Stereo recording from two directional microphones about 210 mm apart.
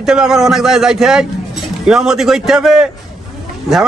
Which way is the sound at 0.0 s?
Centre (ahead or behind).